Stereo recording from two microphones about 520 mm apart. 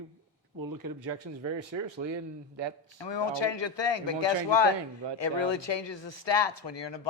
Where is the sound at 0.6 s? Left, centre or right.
Right.